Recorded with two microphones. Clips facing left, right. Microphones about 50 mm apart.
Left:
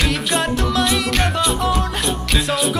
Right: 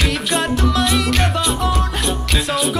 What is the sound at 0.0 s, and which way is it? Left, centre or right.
Music, centre.